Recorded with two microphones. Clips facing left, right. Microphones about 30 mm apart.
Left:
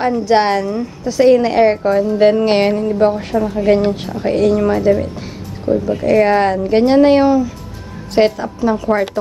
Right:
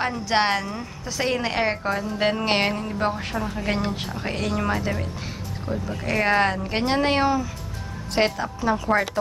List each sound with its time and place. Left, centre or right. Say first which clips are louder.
0.0 s a woman's voice: left 9 dB; centre
5.7 s speech: left 14 dB; centre
6.0 s a woman's voice: left 8 dB; centre